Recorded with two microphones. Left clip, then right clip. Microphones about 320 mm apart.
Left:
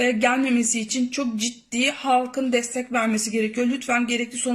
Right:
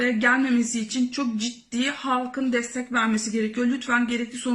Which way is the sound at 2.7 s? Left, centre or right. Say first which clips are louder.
Left 1 dB; left.